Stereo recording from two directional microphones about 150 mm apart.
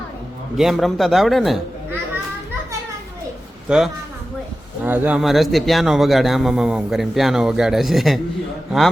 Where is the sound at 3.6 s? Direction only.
5° right (ahead or behind).